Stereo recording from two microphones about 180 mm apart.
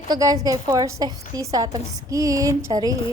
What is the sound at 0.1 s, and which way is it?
A woman's voice, 20° right (ahead or behind).